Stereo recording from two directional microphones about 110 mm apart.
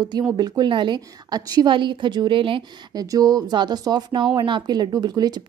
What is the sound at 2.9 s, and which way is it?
Speech, 35° right (ahead or behind).